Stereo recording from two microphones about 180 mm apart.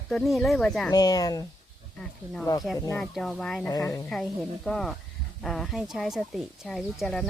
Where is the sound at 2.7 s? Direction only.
20° left (ahead or behind).